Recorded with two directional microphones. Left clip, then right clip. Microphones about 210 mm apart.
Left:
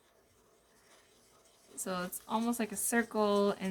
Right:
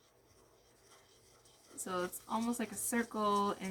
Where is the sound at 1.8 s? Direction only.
35° left (ahead or behind).